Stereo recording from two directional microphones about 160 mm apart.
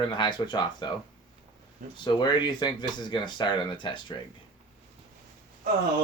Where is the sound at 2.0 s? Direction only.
30° left (ahead or behind).